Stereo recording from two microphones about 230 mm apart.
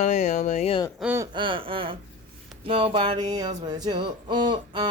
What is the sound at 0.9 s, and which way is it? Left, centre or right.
Speech, centre.